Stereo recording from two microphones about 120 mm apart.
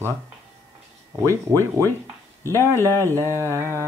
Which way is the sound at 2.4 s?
20° left (ahead or behind).